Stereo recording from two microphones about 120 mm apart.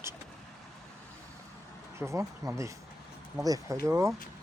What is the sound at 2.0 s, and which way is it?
Speech, 20° right (ahead or behind).